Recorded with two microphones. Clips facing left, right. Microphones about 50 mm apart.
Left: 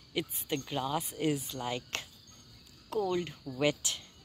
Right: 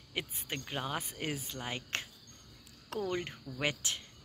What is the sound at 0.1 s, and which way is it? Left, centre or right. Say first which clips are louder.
A woman's voice: left 5 dB; right.